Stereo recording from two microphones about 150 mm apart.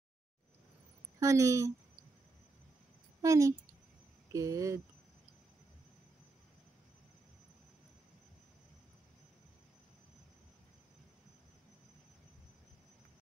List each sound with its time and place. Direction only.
1.2 s a woman's voice: 20° right (ahead or behind)
3.2 s a woman's voice: 20° right (ahead or behind)